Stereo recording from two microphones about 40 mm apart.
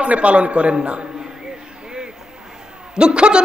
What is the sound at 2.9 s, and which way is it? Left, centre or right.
Speech, right.